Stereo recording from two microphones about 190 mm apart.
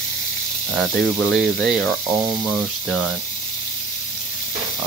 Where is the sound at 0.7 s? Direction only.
Centre (ahead or behind).